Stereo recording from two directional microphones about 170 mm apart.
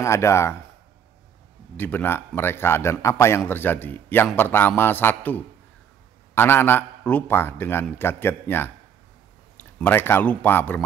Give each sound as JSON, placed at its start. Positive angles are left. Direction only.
{"t": 0.0, "sound": "a man's voice", "side_deg": 15}
{"t": 1.8, "sound": "a man's voice", "side_deg": 10}
{"t": 9.8, "sound": "a man's voice", "side_deg": 15}